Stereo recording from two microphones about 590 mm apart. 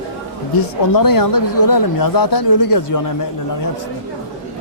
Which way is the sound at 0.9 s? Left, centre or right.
Left.